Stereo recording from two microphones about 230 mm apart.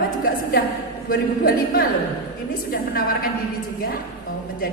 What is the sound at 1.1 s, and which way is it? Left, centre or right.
A woman's voice, left.